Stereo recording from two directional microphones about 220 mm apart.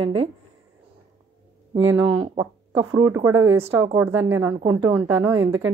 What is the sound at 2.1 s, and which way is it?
A woman's voice, 20° right (ahead or behind).